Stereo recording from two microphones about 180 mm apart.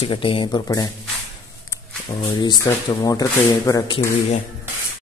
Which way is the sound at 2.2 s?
25° left (ahead or behind).